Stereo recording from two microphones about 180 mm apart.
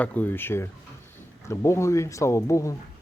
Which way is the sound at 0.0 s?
10° left (ahead or behind).